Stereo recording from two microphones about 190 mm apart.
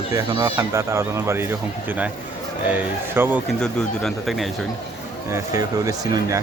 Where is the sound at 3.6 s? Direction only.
5° left (ahead or behind).